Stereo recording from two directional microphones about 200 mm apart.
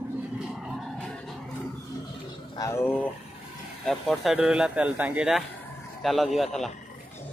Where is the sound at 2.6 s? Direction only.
15° left (ahead or behind).